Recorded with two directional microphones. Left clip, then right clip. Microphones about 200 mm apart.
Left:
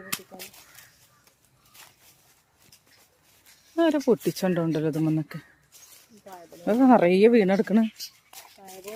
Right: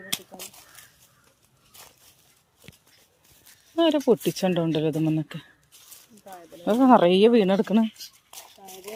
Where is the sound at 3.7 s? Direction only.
5° left (ahead or behind).